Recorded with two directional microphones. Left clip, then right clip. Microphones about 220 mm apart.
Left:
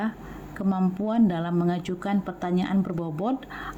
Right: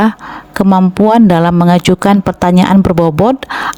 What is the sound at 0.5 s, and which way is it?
Speech, 50° right (ahead or behind).